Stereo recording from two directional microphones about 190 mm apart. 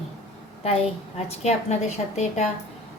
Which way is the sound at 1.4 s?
35° left (ahead or behind).